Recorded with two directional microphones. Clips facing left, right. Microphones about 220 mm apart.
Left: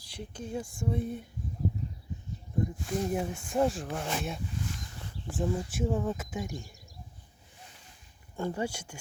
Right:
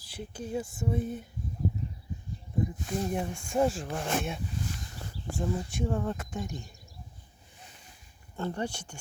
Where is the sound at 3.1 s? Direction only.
5° left (ahead or behind).